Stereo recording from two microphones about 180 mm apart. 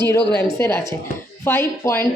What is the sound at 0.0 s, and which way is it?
Speech, 15° left (ahead or behind).